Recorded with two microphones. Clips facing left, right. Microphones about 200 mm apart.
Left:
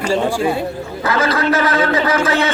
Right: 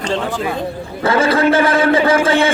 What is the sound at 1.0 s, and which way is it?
A man's voice, 30° right (ahead or behind).